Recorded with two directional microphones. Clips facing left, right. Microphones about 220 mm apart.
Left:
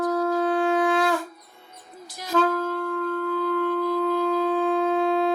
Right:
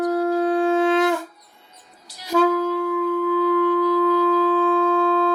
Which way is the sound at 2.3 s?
10° right (ahead or behind).